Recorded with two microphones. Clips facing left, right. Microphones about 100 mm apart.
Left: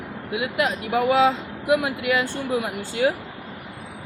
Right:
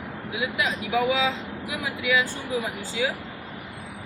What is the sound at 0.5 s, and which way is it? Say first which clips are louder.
Speech: left 3 dB; 55° left (ahead or behind).